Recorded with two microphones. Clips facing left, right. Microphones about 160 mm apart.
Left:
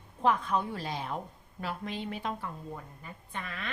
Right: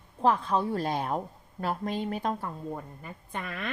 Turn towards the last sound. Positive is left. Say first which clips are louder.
# right 4 dB
turn(degrees=-50)  # may be behind; listen again after turning